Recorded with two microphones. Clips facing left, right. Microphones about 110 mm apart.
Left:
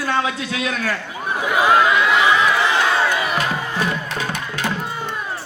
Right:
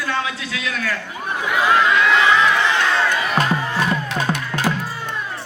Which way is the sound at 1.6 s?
15° left (ahead or behind).